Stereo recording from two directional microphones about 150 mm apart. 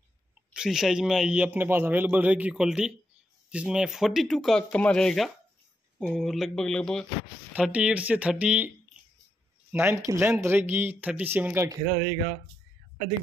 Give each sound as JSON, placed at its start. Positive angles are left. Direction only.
{"t": 0.5, "sound": "a man's voice", "side_deg": -5}
{"t": 7.5, "sound": "a man's voice", "side_deg": -5}